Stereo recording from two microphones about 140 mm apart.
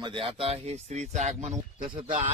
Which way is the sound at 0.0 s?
40° right (ahead or behind).